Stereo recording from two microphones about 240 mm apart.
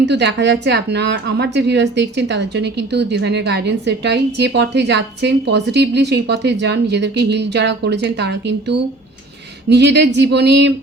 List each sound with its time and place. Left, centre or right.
0.0 s speech: right